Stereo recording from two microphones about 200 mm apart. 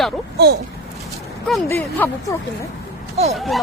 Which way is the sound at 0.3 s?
55° right (ahead or behind).